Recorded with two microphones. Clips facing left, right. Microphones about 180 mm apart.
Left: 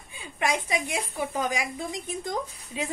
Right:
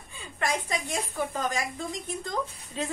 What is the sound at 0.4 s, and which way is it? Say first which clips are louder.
A woman's voice: left 2 dB; 10° left (ahead or behind).